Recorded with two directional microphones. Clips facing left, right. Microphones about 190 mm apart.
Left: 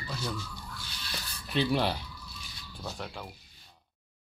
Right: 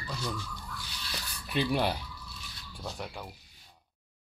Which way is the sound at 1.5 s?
10° right (ahead or behind).